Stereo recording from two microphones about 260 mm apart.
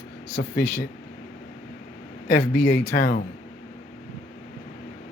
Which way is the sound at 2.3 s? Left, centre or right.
Left.